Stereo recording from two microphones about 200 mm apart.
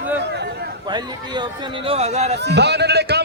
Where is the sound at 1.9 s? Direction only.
30° right (ahead or behind).